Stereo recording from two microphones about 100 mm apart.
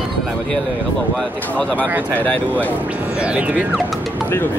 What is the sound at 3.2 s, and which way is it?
Speech, 10° right (ahead or behind).